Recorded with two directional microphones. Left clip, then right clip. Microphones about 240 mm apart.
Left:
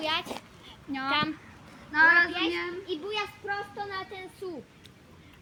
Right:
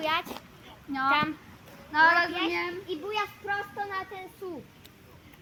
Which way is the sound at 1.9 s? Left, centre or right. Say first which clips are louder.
Even; right.